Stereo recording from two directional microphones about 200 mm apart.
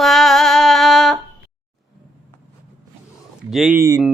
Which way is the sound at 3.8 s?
15° right (ahead or behind).